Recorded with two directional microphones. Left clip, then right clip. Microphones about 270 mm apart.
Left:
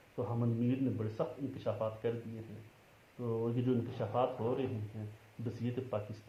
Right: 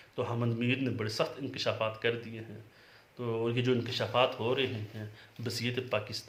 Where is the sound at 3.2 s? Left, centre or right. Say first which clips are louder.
Right 4 dB; right.